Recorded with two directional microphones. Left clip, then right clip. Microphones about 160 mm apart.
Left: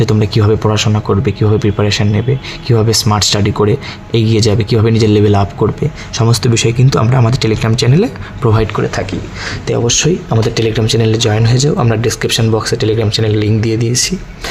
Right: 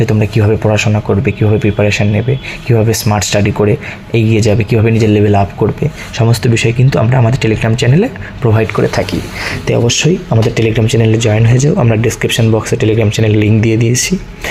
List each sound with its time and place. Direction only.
0.0 s speech: centre (ahead or behind)
8.9 s speech: 20° right (ahead or behind)
10.3 s speech: centre (ahead or behind)